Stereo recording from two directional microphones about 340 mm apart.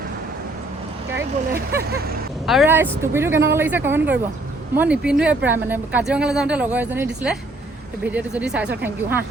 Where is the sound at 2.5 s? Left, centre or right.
Centre.